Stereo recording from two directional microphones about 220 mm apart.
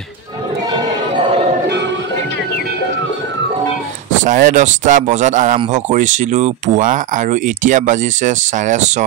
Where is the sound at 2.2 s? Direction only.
55° left (ahead or behind).